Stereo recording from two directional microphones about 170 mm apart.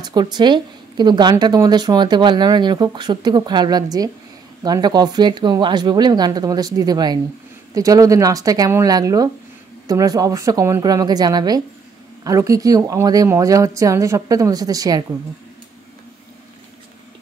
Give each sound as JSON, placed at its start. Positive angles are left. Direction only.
{"t": 0.0, "sound": "a woman's voice", "side_deg": -25}